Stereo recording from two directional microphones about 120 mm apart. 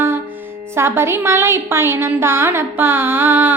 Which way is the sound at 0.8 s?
20° right (ahead or behind).